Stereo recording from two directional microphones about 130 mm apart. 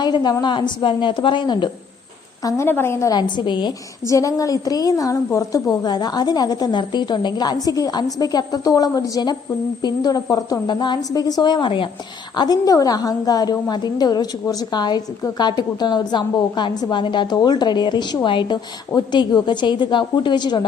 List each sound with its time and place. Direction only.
0.0 s a woman's voice: 35° left (ahead or behind)
12.4 s a woman's voice: 30° left (ahead or behind)